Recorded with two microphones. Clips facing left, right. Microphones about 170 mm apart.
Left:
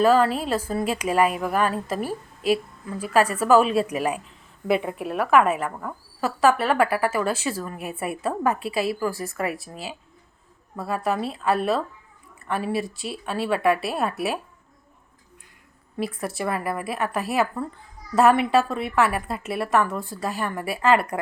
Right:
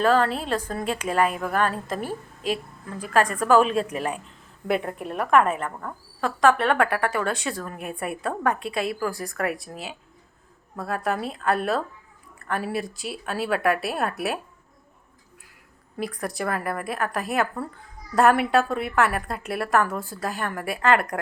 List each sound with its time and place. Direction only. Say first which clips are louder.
0.0 s a woman's voice: left 2 dB; 5° left (ahead or behind)
16.0 s speech: left 1 dB; centre (ahead or behind)